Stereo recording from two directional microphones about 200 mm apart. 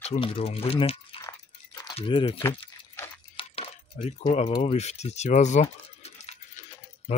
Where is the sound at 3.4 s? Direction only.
30° left (ahead or behind).